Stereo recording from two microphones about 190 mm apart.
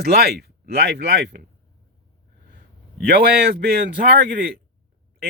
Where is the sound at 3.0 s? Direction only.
50° right (ahead or behind).